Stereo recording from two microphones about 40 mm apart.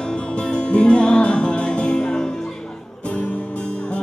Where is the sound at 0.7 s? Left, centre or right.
Left.